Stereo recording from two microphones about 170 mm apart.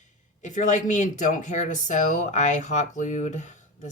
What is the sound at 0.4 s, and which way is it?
Speech, 45° left (ahead or behind).